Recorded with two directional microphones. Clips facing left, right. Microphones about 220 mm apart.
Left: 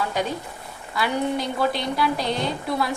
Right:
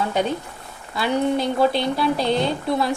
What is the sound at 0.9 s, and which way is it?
A woman's voice, 25° right (ahead or behind).